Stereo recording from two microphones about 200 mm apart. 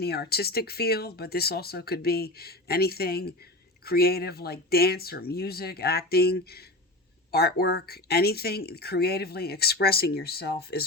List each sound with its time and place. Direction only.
0.0 s speech: 50° left (ahead or behind)